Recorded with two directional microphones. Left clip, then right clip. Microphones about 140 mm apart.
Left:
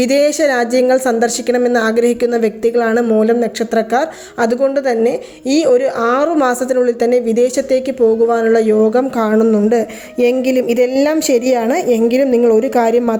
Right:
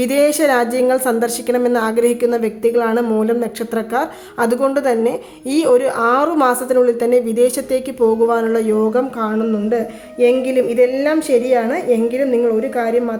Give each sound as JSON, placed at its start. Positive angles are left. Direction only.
{"t": 0.0, "sound": "a woman's voice", "side_deg": 15}
{"t": 9.1, "sound": "a woman's voice", "side_deg": 45}